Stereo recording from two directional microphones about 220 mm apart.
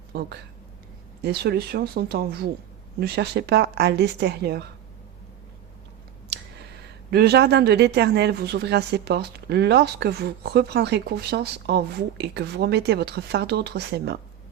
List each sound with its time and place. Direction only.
0.1 s speech: 45° right (ahead or behind)
6.2 s speech: 50° right (ahead or behind)